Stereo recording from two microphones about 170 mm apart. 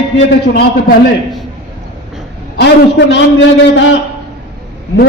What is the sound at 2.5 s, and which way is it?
A man's voice, 85° left.